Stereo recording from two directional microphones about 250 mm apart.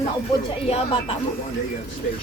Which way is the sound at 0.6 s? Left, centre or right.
Left.